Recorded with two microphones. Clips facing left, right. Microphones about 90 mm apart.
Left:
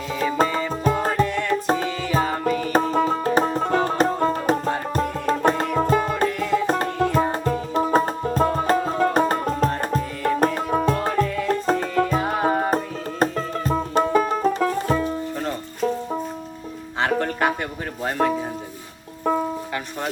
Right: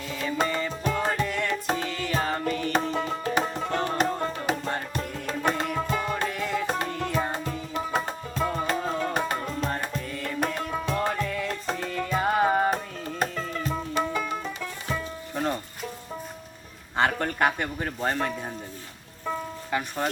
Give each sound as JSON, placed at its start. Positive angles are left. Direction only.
{"t": 0.9, "sound": "music", "side_deg": 45}
{"t": 1.3, "sound": "music", "side_deg": 0}
{"t": 2.4, "sound": "music", "side_deg": 45}
{"t": 3.8, "sound": "tabla", "side_deg": 45}
{"t": 4.9, "sound": "music", "side_deg": 45}
{"t": 6.2, "sound": "music", "side_deg": 0}
{"t": 6.7, "sound": "music", "side_deg": 45}
{"t": 12.1, "sound": "music", "side_deg": 0}
{"t": 13.3, "sound": "music", "side_deg": 40}
{"t": 17.0, "sound": "music", "side_deg": 0}
{"t": 19.2, "sound": "music", "side_deg": 45}